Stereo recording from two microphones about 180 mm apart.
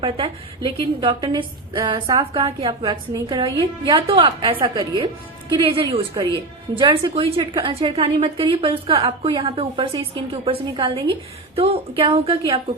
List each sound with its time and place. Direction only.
0.0 s a woman's voice: 30° right (ahead or behind)